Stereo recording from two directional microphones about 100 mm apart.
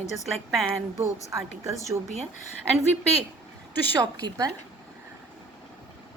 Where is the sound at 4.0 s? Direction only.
40° right (ahead or behind).